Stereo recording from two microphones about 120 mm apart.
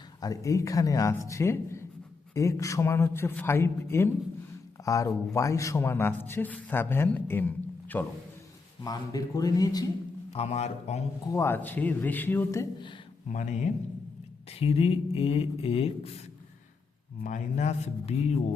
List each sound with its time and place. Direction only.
0.2 s a man's voice: 30° left (ahead or behind)
8.8 s speech: 30° left (ahead or behind)
10.3 s speech: 60° left (ahead or behind)
11.3 s speech: 25° left (ahead or behind)
13.2 s speech: 80° left
14.5 s speech: 55° left (ahead or behind)
17.2 s a man's voice: 80° left